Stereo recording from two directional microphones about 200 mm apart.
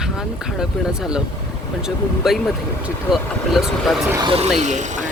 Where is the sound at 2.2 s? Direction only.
Centre (ahead or behind).